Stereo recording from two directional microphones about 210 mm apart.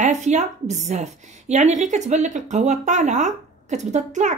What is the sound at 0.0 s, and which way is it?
A woman's voice, 35° right (ahead or behind).